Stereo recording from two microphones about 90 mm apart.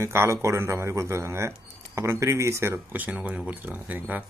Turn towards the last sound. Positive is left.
turn(degrees=-20)  # may be behind; listen again after turning